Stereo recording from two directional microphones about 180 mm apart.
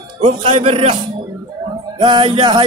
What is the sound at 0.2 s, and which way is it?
Speech, 30° right (ahead or behind).